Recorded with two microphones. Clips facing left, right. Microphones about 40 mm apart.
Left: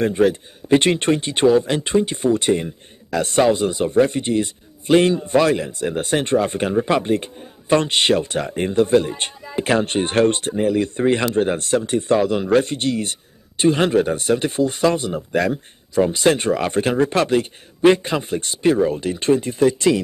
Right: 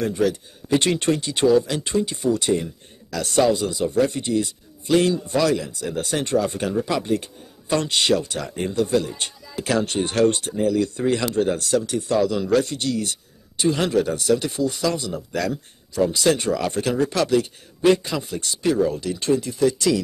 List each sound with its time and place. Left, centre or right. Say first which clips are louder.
0.0 s speech: left 5 dB; left